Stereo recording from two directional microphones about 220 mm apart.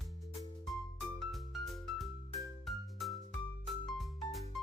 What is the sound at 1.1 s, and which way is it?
Music, centre (ahead or behind).